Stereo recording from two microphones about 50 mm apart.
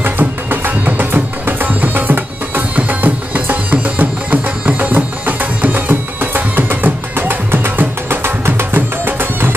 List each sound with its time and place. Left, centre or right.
0.0 s music: right